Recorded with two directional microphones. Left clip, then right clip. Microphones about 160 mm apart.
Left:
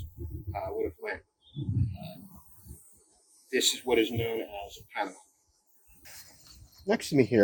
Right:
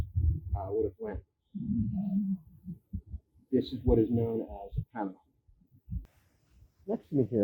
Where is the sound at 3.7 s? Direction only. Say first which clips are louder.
Left 1 dB; 65° left (ahead or behind).